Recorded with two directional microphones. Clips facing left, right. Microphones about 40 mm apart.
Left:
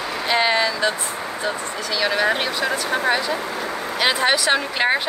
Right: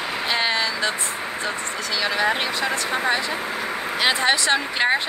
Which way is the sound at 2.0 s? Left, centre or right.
Centre.